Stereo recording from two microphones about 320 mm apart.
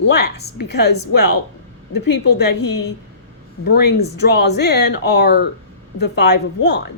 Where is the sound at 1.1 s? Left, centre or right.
Left.